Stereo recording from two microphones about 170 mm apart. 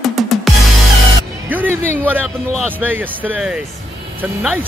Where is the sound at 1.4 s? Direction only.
10° right (ahead or behind).